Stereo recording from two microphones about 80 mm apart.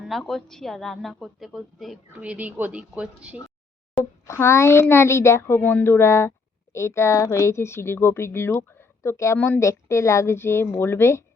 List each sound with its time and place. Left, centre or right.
0.0 s a woman's voice: centre
2.1 s a woman's voice: centre
4.3 s a woman's voice: left